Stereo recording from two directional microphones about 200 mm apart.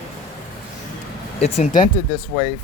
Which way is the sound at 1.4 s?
35° left (ahead or behind).